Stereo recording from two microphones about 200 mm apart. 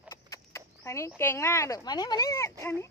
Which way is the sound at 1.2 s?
10° left (ahead or behind).